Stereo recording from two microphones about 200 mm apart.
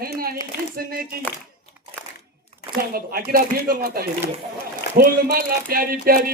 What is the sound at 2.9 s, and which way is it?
Speech, 50° right (ahead or behind).